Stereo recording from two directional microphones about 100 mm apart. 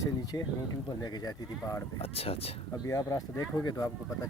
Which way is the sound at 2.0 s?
80° left.